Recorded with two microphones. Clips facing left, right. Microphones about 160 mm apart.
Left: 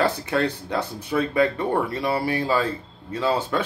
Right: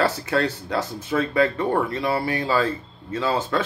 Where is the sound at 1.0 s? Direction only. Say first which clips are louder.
Even; 15° left (ahead or behind).